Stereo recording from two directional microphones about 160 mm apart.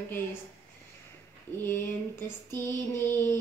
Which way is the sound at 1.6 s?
15° left (ahead or behind).